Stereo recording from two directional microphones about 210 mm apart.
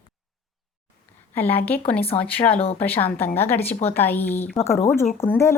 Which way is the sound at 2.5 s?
25° left (ahead or behind).